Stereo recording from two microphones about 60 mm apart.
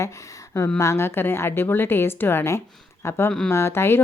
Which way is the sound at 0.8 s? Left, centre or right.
Left.